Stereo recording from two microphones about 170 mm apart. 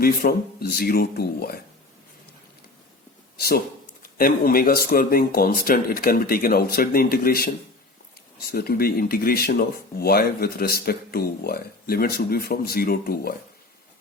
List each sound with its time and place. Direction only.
0.0 s speech: 65° left (ahead or behind)
3.3 s speech: 60° left (ahead or behind)